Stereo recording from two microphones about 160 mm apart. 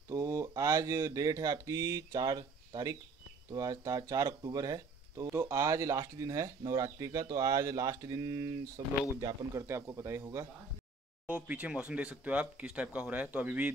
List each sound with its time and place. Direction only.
0.1 s speech: 20° right (ahead or behind)
11.2 s speech: 5° right (ahead or behind)